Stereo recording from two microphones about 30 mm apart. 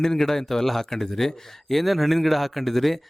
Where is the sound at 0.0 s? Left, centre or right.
Centre.